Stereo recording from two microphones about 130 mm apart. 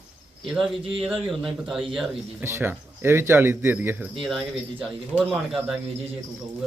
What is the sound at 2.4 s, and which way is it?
A man's voice, 15° right (ahead or behind).